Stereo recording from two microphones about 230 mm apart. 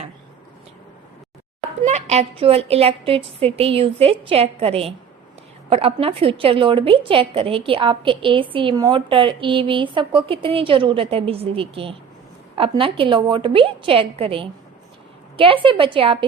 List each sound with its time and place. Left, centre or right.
1.8 s a woman's voice: right
15.6 s a woman's voice: right